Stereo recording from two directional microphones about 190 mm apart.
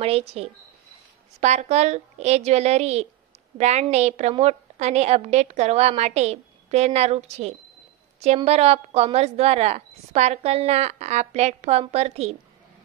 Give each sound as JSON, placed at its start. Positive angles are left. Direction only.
{"t": 0.0, "sound": "a woman's voice", "side_deg": -30}